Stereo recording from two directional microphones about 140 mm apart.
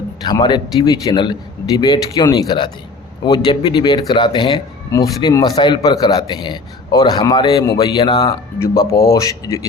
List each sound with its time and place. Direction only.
0.3 s a man's voice: 30° left (ahead or behind)
8.3 s a man's voice: 20° left (ahead or behind)